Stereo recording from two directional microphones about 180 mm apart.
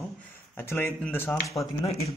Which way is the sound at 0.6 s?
10° left (ahead or behind).